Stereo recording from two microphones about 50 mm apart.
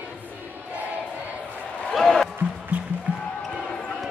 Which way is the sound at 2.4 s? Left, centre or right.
Right.